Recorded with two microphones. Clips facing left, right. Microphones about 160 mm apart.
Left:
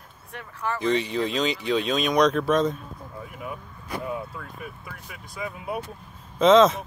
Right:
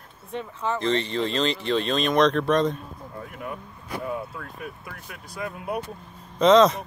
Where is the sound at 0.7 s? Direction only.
5° left (ahead or behind).